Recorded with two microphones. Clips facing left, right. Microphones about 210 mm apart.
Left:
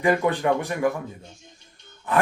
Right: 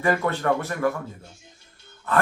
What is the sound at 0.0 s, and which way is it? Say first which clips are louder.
Speech: left 2 dB; 15° left (ahead or behind).